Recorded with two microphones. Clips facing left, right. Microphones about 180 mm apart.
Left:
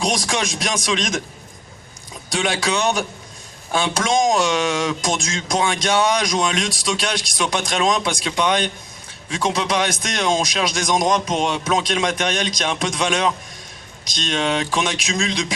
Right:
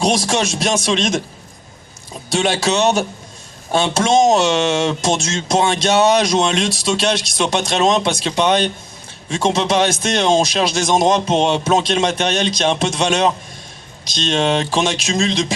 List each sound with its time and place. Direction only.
0.0 s speech: 30° right (ahead or behind)
2.3 s speech: 30° right (ahead or behind)